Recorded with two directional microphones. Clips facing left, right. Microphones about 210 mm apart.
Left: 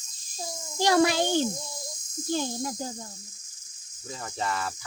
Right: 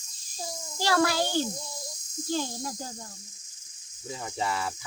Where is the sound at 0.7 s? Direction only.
20° left (ahead or behind).